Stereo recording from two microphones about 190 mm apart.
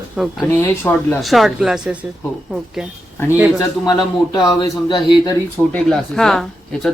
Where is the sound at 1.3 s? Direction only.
Centre (ahead or behind).